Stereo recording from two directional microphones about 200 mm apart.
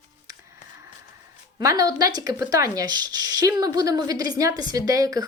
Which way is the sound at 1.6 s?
15° right (ahead or behind).